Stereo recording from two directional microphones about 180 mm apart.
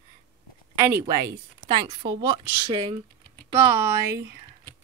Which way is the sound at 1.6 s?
30° right (ahead or behind).